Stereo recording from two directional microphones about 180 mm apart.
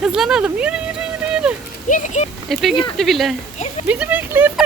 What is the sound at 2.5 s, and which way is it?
Speech, centre (ahead or behind).